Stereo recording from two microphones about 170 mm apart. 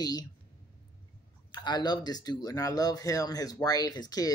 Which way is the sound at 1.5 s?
25° left (ahead or behind).